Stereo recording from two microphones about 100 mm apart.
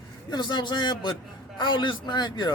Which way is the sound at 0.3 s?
50° left (ahead or behind).